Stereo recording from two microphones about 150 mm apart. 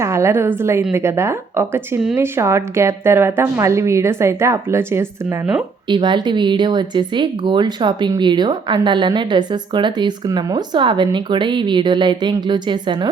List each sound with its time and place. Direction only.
0.0 s speech: 20° right (ahead or behind)
5.9 s speech: 30° right (ahead or behind)